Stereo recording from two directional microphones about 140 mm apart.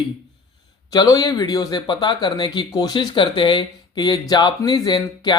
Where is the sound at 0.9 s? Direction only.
25° left (ahead or behind).